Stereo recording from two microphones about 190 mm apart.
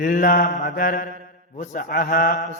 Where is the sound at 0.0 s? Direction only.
45° left (ahead or behind).